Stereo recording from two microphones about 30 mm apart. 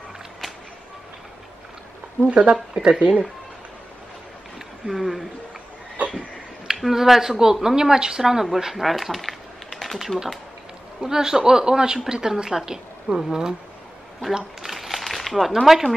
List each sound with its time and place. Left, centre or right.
2.2 s speech: right
4.8 s speech: centre
6.9 s a woman's voice: centre
8.7 s typing: centre
9.9 s speech: centre
11.0 s a woman's voice: centre
14.6 s a sound: centre